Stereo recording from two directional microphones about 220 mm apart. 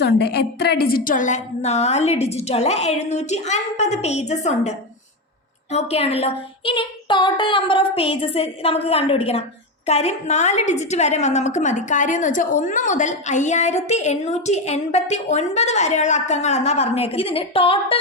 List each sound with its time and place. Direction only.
0.0 s a woman's voice: 50° left (ahead or behind); by 4.7 s 30° left (ahead or behind)
5.7 s a woman's voice: 30° left (ahead or behind)